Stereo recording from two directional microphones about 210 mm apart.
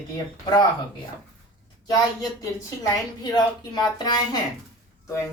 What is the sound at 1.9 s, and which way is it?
A woman's voice, 15° left (ahead or behind).